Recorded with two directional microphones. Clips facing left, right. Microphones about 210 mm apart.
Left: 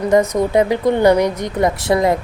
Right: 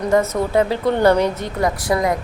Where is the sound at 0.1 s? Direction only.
15° left (ahead or behind).